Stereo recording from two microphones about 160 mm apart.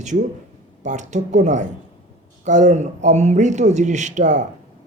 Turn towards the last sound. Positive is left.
turn(degrees=-50)  # may be behind; listen again after turning